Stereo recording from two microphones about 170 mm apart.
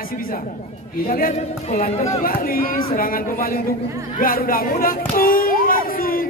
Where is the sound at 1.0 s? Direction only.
55° left (ahead or behind).